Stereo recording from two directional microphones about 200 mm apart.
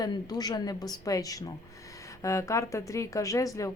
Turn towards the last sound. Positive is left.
turn(degrees=15)  # may be behind; listen again after turning